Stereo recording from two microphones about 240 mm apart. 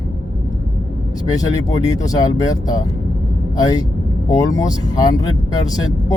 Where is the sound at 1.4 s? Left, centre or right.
Centre.